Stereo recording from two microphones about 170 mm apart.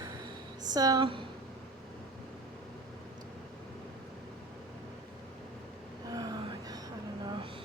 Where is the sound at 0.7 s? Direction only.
20° right (ahead or behind).